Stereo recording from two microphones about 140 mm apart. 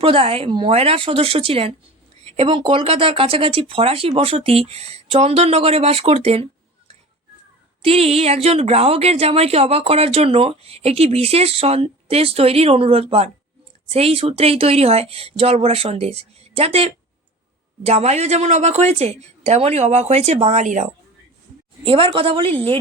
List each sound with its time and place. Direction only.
0.0 s speech: 40° right (ahead or behind); by 20.9 s 60° right (ahead or behind)
21.8 s a woman's voice: 40° right (ahead or behind)